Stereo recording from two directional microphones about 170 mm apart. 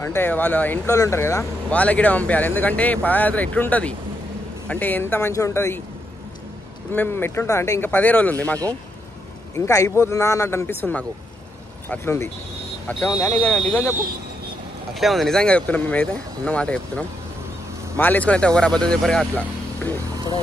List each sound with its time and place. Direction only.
0.0 s speech: 15° left (ahead or behind)
6.9 s speech: 10° left (ahead or behind)
9.7 s speech: 20° left (ahead or behind)
13.4 s speech: 5° left (ahead or behind)
15.0 s speech: centre (ahead or behind)